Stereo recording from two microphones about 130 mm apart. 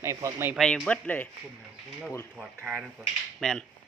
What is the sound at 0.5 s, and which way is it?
Speech, 5° left (ahead or behind).